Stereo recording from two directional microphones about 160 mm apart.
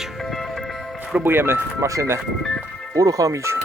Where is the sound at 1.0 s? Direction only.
10° right (ahead or behind).